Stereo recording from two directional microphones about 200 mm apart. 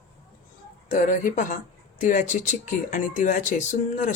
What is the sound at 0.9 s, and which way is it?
Speech, 40° left (ahead or behind).